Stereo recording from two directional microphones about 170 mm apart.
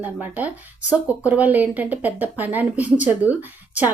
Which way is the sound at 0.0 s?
10° right (ahead or behind).